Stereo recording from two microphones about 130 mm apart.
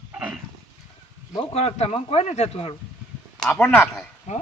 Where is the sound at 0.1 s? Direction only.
10° right (ahead or behind).